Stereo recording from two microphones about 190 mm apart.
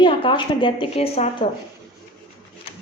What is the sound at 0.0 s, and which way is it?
A woman's voice, 25° left (ahead or behind).